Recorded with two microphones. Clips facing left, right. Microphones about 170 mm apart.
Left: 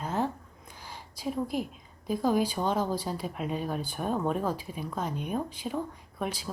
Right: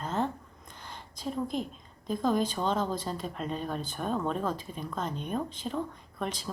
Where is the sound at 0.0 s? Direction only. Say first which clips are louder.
Left 1 dB; 10° left (ahead or behind).